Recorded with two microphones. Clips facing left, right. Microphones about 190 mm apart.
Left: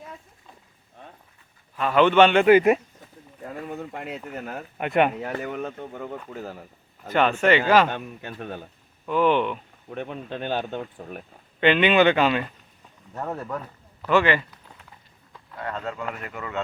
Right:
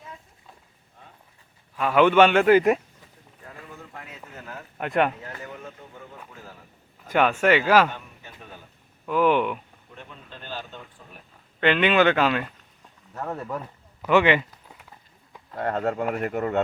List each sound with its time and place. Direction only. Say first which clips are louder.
1.7 s a man's voice: even; 5° right (ahead or behind)
3.7 s speech: left 10 dB; 80° left
4.8 s a man's voice: left 2 dB; 5° left (ahead or behind)
5.2 s speech: left 9 dB; 75° left (ahead or behind)
7.1 s speech: even; 10° right (ahead or behind)
7.9 s speech: left 7 dB; 75° left (ahead or behind)
9.0 s speech: even; 5° right (ahead or behind)
9.9 s speech: left 12 dB; 65° left (ahead or behind)
11.6 s a man's voice: left 2 dB; centre (ahead or behind)
14.0 s a sound: right 1 dB; 15° right (ahead or behind)
15.5 s speech: right 6 dB; 50° right (ahead or behind)